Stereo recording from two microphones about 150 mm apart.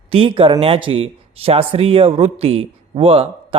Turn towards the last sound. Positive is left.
turn(degrees=-40)  # may be behind; listen again after turning